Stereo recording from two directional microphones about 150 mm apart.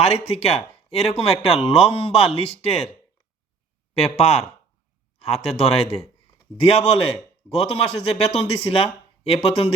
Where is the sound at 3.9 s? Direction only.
45° left (ahead or behind).